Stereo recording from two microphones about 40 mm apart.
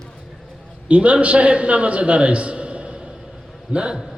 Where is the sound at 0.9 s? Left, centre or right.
Right.